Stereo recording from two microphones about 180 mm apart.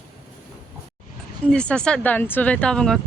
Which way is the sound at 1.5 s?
5° left (ahead or behind).